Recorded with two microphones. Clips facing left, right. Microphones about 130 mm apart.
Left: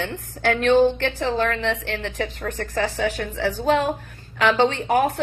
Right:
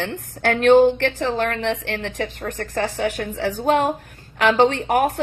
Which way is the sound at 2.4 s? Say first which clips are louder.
Even; 45° right (ahead or behind).